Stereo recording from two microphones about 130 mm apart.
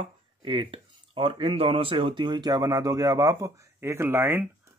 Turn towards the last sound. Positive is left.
turn(degrees=-15)  # may be behind; listen again after turning